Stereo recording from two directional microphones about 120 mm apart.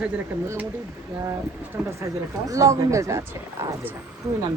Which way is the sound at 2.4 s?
30° right (ahead or behind).